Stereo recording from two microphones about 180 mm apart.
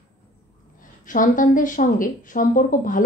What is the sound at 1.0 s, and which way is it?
Speech, 45° left (ahead or behind).